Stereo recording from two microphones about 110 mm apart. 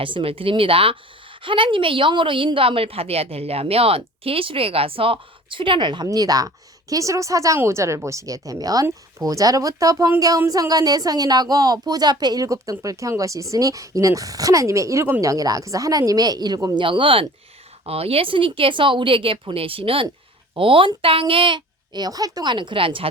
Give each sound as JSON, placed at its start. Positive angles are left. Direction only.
{"t": 0.0, "sound": "a woman's voice", "side_deg": -55}
{"t": 16.7, "sound": "a woman's voice", "side_deg": -50}
{"t": 17.8, "sound": "a woman's voice", "side_deg": -65}